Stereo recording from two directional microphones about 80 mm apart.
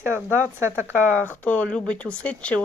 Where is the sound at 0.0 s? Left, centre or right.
Right.